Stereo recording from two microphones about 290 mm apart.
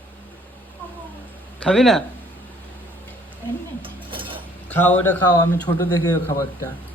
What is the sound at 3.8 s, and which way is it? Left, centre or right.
Cutlery, centre.